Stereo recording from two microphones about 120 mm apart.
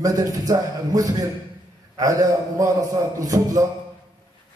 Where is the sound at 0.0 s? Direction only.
30° right (ahead or behind).